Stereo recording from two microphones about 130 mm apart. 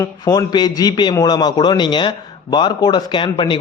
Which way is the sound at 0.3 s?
35° left (ahead or behind).